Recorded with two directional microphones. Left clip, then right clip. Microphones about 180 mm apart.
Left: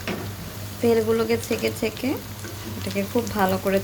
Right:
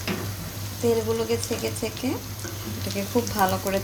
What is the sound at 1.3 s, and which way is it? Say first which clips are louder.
Speech: left 3 dB; 20° left (ahead or behind).